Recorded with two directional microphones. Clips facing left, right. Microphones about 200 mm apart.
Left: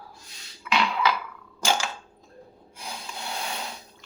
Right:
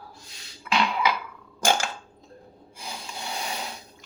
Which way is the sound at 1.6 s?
55° right (ahead or behind).